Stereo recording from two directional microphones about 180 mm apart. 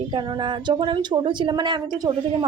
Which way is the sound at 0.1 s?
25° right (ahead or behind).